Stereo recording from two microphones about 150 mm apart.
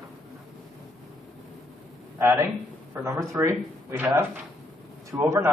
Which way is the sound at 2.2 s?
15° right (ahead or behind).